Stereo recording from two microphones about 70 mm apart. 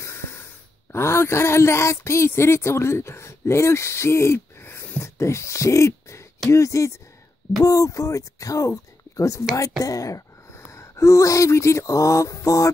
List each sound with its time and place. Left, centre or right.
0.0 s snort: left
0.9 s speech: left